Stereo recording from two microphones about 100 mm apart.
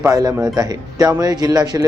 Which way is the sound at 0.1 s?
40° right (ahead or behind).